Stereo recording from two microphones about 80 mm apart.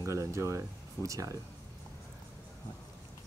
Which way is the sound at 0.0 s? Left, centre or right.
Right.